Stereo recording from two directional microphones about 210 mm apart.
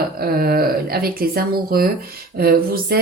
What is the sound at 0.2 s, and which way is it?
Speech, 45° right (ahead or behind).